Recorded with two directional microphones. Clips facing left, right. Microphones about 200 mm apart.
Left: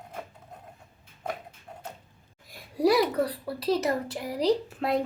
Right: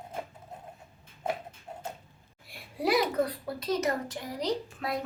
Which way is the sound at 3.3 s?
30° left (ahead or behind).